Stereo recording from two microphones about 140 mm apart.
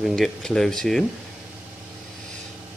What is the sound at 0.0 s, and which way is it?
Speech, centre (ahead or behind).